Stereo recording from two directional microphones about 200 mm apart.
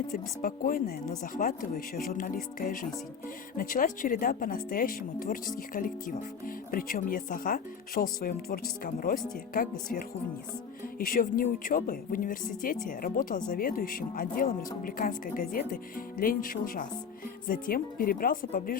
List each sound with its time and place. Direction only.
0.1 s speech: 45° left (ahead or behind)
10.9 s speech: 45° left (ahead or behind)